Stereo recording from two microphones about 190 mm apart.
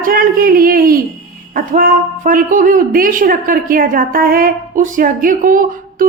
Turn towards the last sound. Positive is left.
turn(degrees=-45)  # may be behind; listen again after turning